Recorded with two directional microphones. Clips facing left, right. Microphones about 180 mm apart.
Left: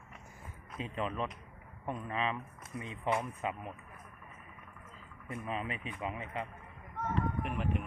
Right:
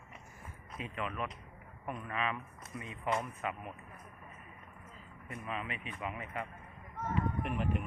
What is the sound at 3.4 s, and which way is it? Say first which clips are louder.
Speech: left 2 dB; 25° left (ahead or behind).